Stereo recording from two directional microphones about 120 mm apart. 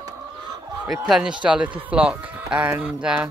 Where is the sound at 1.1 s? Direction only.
5° right (ahead or behind).